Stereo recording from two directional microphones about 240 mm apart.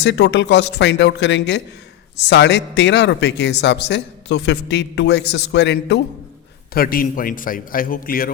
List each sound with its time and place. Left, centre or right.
0.0 s a man's voice: left